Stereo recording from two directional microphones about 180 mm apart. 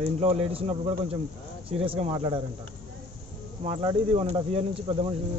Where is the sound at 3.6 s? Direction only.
30° right (ahead or behind).